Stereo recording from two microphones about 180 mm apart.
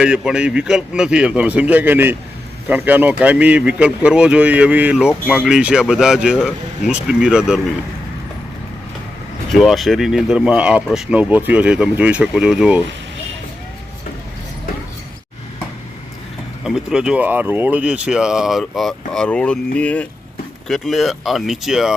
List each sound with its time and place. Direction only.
0.0 s speech: 5° right (ahead or behind)
9.5 s speech: centre (ahead or behind)
16.6 s speech: 5° right (ahead or behind)